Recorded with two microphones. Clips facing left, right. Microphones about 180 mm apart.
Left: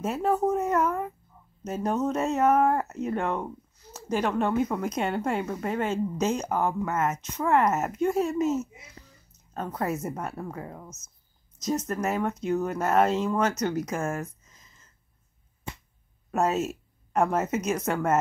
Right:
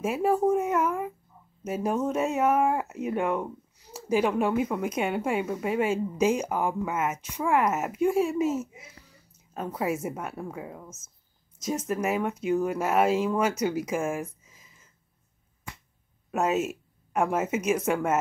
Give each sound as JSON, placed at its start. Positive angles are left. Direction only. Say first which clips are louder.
{"t": 0.0, "sound": "a woman's voice", "louder": "right 1 dB", "side_deg": -10}
{"t": 15.7, "sound": "a sound", "louder": "left 4 dB", "side_deg": 25}
{"t": 16.3, "sound": "speech", "louder": "even", "side_deg": -5}